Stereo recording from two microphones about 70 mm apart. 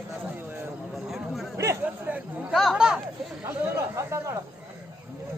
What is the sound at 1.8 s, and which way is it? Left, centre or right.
Hubbub, centre.